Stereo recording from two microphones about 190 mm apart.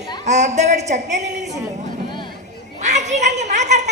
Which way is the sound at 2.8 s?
40° right (ahead or behind).